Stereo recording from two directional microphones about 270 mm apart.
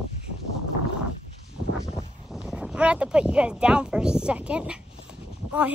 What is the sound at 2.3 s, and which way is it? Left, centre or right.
Speech, centre.